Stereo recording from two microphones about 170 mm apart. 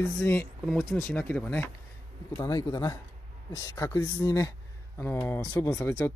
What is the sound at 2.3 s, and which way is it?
A man's voice, 20° left (ahead or behind).